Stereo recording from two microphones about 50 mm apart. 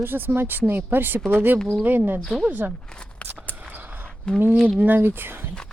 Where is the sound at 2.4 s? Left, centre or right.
Right.